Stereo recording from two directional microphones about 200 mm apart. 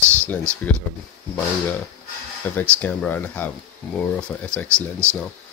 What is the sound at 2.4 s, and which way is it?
Speech, 10° left (ahead or behind).